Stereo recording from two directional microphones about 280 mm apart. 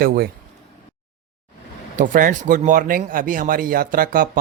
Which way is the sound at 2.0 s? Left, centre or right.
Right.